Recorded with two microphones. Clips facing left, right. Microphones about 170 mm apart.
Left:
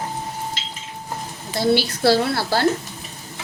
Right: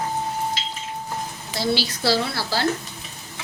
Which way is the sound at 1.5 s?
55° left (ahead or behind).